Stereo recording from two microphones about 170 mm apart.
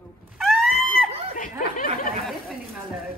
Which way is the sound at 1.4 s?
55° left (ahead or behind).